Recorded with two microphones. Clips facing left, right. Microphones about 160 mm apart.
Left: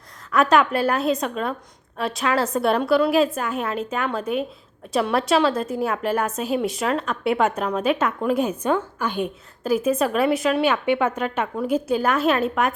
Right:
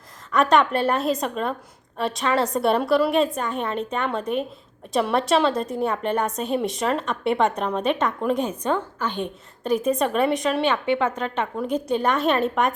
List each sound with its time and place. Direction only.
0.3 s a woman's voice: centre (ahead or behind)